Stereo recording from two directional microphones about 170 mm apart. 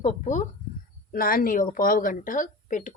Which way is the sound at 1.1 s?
60° left (ahead or behind).